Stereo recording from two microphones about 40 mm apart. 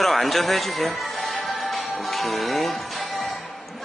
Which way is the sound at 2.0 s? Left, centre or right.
Centre.